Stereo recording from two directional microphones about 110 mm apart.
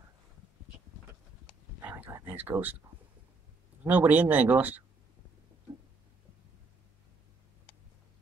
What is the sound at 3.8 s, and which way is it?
Speech, 15° right (ahead or behind).